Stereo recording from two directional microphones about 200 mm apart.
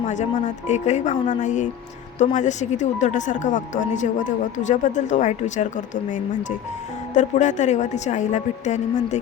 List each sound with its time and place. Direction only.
0.1 s speech: 35° left (ahead or behind)